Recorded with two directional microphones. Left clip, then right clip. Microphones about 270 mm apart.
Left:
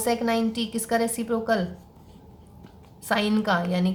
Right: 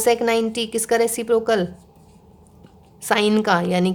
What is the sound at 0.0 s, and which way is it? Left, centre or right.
A woman's voice, right.